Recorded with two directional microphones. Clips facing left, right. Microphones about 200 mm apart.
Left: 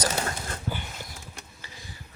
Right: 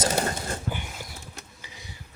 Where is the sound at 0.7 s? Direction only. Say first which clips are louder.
Right 1 dB; 15° right (ahead or behind).